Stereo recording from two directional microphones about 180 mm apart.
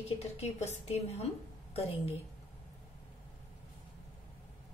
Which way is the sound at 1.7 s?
35° left (ahead or behind).